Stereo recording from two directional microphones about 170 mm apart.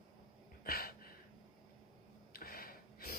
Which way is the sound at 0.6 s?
65° left (ahead or behind).